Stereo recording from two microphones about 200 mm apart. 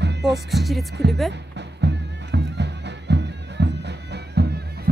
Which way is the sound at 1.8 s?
60° right (ahead or behind).